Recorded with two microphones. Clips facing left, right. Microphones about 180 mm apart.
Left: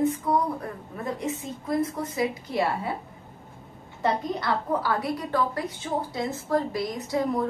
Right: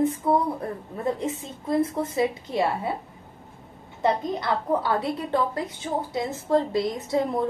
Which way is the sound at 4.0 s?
20° right (ahead or behind).